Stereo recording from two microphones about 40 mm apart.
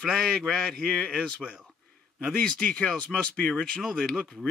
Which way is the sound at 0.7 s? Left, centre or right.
Left.